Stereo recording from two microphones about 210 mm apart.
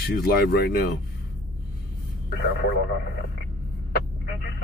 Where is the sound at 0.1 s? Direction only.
50° left (ahead or behind).